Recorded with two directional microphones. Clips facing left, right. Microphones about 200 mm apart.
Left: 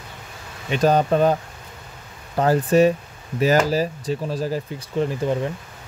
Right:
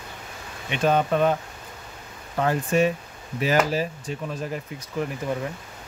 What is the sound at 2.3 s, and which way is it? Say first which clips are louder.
Speech: left 5 dB; 35° left (ahead or behind).